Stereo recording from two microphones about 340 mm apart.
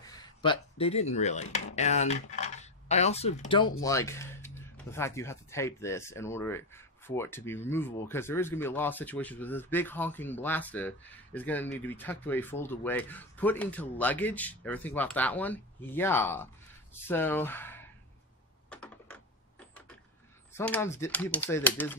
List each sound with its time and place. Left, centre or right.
0.0 s speech: centre
18.7 s typing: centre
20.5 s speech: centre